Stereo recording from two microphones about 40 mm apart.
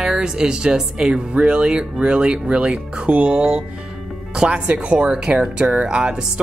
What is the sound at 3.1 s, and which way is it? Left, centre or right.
Speech, right.